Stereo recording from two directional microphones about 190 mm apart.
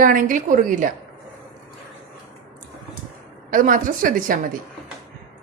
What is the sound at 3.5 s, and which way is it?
Speech, 45° right (ahead or behind).